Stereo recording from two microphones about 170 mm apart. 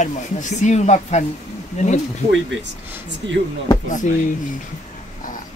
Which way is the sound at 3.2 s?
90° right.